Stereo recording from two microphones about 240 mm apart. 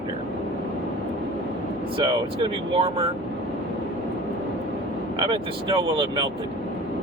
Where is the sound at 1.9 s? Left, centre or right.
Right.